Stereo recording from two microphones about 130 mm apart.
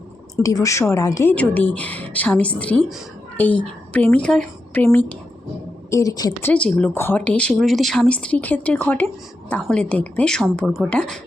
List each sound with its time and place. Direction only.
0.3 s speech: 25° left (ahead or behind)
1.3 s speech: 15° left (ahead or behind)
5.9 s speech: 25° left (ahead or behind)
6.4 s speech: 10° left (ahead or behind)